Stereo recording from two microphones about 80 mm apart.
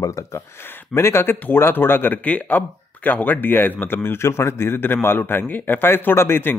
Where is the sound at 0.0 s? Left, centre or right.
Left.